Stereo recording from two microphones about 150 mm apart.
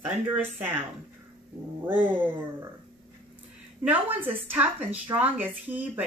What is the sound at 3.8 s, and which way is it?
Speech, 10° right (ahead or behind).